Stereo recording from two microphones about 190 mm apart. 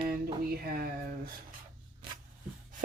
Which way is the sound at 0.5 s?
50° right (ahead or behind).